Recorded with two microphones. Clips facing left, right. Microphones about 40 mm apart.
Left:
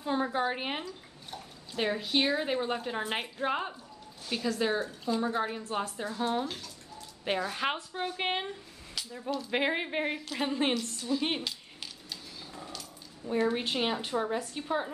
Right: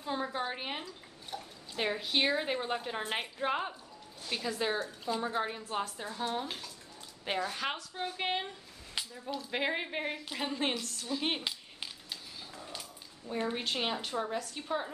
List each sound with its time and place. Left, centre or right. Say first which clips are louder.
0.0 s a woman's voice: left 5 dB; centre
0.8 s a woman's voice: left 3 dB; centre
9.0 s a sound: right 1 dB; right
9.5 s a woman's voice: left 3 dB; centre
11.0 s speech: left 3 dB; centre
11.4 s a sound: even; centre
13.5 s a woman's voice: left 4 dB; centre